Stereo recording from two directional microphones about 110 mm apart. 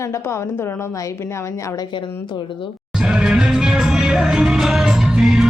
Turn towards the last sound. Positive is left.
turn(degrees=-5)  # may be behind; listen again after turning